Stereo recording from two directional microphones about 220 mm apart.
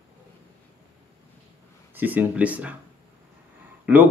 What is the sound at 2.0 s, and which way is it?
Speech, 10° right (ahead or behind).